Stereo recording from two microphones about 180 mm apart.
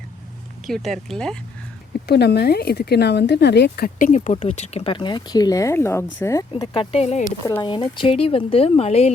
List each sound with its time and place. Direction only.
0.7 s speech: centre (ahead or behind)
2.0 s speech: 65° left (ahead or behind); by 6.4 s 20° left (ahead or behind)
6.5 s speech: 30° left (ahead or behind)